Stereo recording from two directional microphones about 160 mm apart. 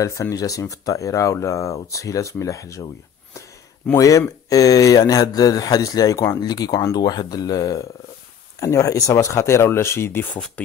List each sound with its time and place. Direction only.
0.0 s speech: 20° left (ahead or behind)
3.3 s a sound: 15° left (ahead or behind)
4.5 s speech: 20° left (ahead or behind)